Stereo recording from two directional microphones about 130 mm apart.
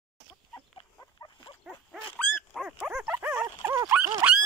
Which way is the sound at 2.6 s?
5° right (ahead or behind).